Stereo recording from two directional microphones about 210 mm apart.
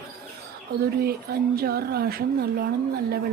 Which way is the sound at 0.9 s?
50° right (ahead or behind).